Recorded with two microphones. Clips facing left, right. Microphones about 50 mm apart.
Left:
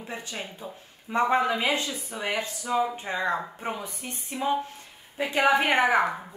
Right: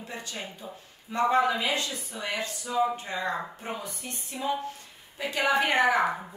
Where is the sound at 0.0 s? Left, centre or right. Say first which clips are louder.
Left 2 dB; left.